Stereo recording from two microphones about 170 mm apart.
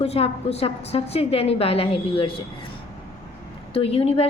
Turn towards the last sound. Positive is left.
turn(degrees=35)  # may be behind; listen again after turning